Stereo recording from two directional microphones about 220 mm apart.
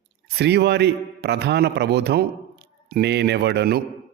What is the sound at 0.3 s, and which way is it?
A man's voice, 50° right (ahead or behind).